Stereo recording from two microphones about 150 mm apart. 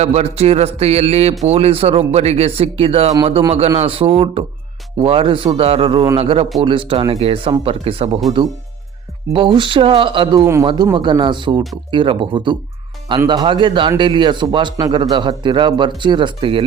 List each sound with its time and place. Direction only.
0.0 s a man's voice: 45° right (ahead or behind)
9.3 s a man's voice: 35° right (ahead or behind)
10.4 s a man's voice: 20° right (ahead or behind)
10.9 s a man's voice: 30° right (ahead or behind)